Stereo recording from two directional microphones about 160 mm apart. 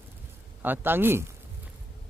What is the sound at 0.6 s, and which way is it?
Speech, 10° right (ahead or behind).